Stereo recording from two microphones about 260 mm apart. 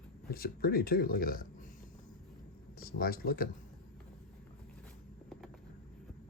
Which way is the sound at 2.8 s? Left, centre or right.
Left.